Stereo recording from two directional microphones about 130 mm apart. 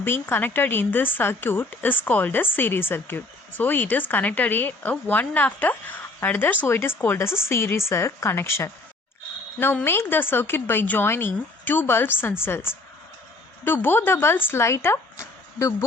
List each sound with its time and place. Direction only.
0.0 s a woman's voice: 15° left (ahead or behind)